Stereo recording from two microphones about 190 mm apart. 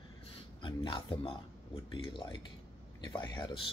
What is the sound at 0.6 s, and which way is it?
Speech, 25° left (ahead or behind).